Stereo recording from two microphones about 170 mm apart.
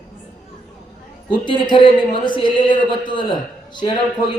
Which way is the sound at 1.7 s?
30° left (ahead or behind).